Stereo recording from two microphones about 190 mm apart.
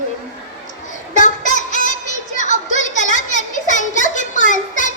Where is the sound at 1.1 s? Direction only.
40° left (ahead or behind).